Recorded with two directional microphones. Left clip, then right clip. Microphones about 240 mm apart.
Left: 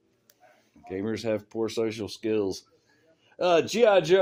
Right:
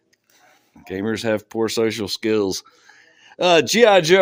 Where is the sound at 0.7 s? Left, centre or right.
Right.